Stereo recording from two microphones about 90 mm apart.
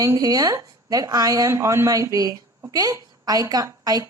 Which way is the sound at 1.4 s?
30° right (ahead or behind).